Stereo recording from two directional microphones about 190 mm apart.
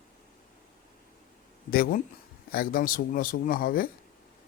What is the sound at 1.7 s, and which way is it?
Speech, 50° left (ahead or behind).